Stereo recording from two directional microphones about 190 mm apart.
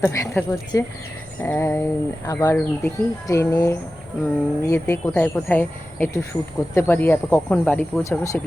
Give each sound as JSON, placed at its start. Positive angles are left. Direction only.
{"t": 0.0, "sound": "speech", "side_deg": 15}